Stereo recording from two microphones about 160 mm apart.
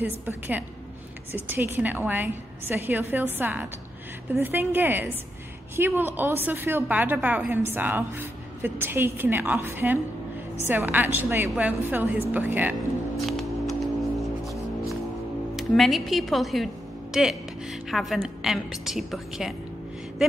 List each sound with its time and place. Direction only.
0.0 s a woman's voice: 10° right (ahead or behind)
13.4 s music: centre (ahead or behind)
15.5 s speech: centre (ahead or behind)